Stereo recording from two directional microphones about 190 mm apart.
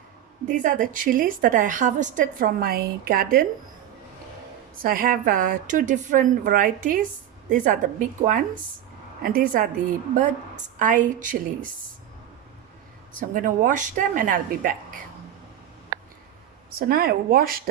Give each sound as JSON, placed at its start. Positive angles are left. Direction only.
{"t": 0.4, "sound": "a woman's voice", "side_deg": -40}
{"t": 4.8, "sound": "a woman's voice", "side_deg": -50}
{"t": 10.8, "sound": "a woman's voice", "side_deg": -40}
{"t": 13.1, "sound": "a woman's voice", "side_deg": -45}
{"t": 16.9, "sound": "a woman's voice", "side_deg": -50}